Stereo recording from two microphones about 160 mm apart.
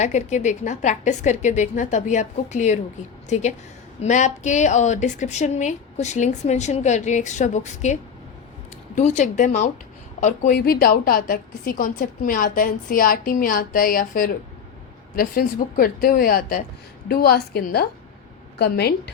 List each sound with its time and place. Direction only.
0.0 s a woman's voice: 45° left (ahead or behind)
9.0 s a woman's voice: 50° left (ahead or behind)
17.1 s a woman's voice: 75° left (ahead or behind)
18.6 s a woman's voice: 90° left